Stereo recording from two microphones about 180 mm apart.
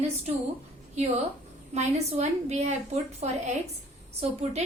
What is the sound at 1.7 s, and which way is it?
A woman's voice, 40° right (ahead or behind).